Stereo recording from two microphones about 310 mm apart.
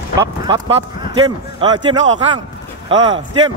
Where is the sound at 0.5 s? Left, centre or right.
Centre.